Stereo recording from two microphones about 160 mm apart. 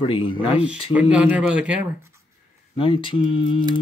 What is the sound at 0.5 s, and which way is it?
Speech, 5° right (ahead or behind).